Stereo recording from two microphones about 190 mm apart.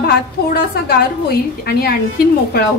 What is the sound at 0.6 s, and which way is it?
A woman's voice, 55° left (ahead or behind).